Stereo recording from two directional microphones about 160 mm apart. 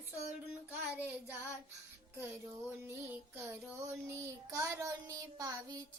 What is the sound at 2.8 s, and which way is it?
Music, 15° right (ahead or behind).